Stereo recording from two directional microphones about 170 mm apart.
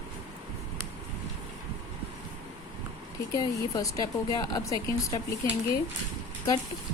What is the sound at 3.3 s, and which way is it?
A woman's voice, 20° left (ahead or behind).